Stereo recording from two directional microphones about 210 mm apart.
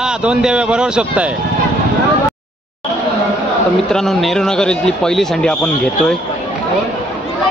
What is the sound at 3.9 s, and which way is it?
A man's voice, centre (ahead or behind).